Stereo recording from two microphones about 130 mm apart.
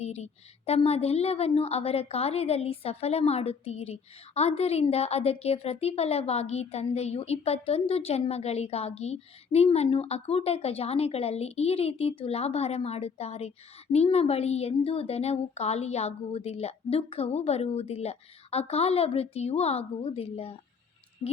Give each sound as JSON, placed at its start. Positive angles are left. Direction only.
{"t": 0.0, "sound": "a woman's voice", "side_deg": 55}